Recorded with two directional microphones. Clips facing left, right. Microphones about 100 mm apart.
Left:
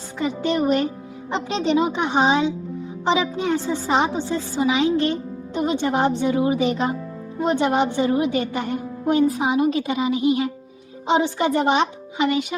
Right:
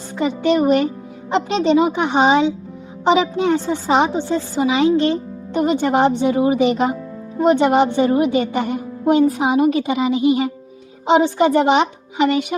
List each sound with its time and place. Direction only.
0.2 s a woman's voice: 70° right (ahead or behind)
5.5 s a woman's voice: 60° right (ahead or behind)